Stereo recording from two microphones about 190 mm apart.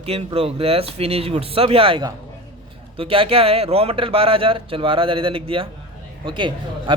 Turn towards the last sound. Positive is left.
turn(degrees=-25)  # may be behind; listen again after turning